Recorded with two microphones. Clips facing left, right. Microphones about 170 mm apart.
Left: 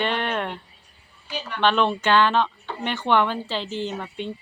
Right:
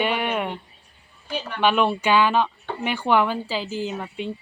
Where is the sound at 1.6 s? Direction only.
10° right (ahead or behind).